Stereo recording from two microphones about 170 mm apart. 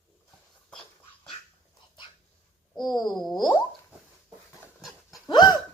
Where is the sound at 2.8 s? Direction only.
25° left (ahead or behind).